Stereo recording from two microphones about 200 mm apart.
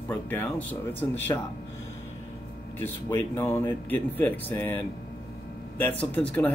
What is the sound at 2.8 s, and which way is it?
Speech, 10° left (ahead or behind).